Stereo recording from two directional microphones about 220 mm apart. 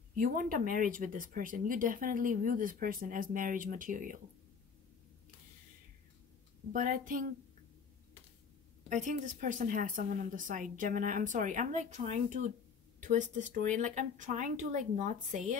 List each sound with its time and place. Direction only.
0.1 s speech: 40° right (ahead or behind)
6.7 s speech: 35° right (ahead or behind)
8.8 s speech: 35° right (ahead or behind)